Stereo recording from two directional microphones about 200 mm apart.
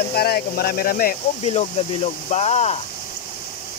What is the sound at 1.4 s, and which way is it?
Speech, 30° left (ahead or behind).